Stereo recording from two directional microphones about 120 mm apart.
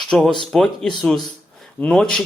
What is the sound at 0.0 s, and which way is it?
A man's voice, 5° left (ahead or behind).